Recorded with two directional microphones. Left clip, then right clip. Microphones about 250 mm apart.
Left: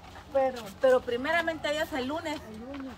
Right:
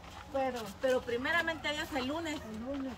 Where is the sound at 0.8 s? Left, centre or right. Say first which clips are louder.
Left 7 dB; centre.